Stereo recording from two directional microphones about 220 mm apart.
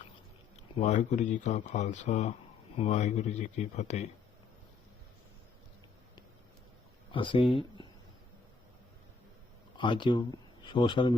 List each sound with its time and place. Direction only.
0.5 s speech: 30° left (ahead or behind)
7.1 s speech: 25° left (ahead or behind)
9.7 s speech: 20° left (ahead or behind)